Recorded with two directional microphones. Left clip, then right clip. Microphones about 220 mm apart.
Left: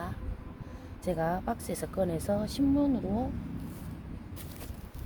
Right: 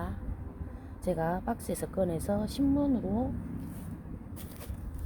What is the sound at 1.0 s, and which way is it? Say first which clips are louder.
A woman's voice: even; 15° right (ahead or behind).